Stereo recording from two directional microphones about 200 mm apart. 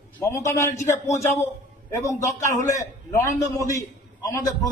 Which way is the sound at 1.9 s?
15° left (ahead or behind).